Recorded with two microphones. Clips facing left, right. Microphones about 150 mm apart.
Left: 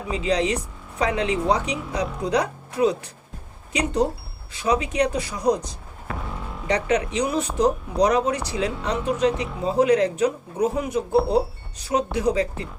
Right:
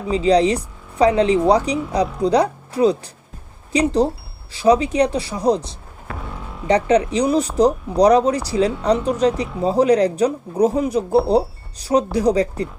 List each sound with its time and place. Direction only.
0.1 s speech: 35° right (ahead or behind)
6.1 s music: centre (ahead or behind)
6.7 s speech: 35° right (ahead or behind)